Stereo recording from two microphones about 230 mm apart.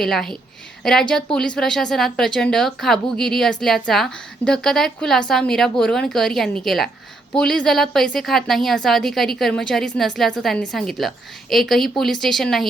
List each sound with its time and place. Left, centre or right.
0.0 s a woman's voice: centre